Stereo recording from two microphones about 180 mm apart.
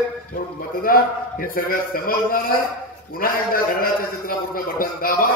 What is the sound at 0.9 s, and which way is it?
A man's voice, 50° left (ahead or behind).